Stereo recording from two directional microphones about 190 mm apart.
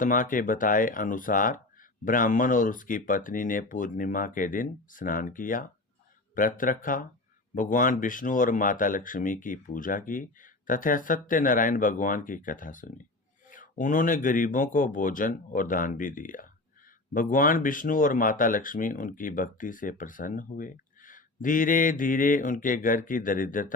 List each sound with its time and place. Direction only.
0.0 s speech: 45° left (ahead or behind)